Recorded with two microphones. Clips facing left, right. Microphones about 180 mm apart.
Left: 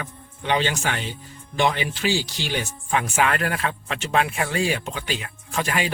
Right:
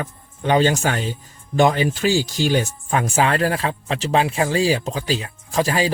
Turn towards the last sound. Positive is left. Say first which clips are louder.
# right 6 dB
turn(degrees=-35)  # may be behind; listen again after turning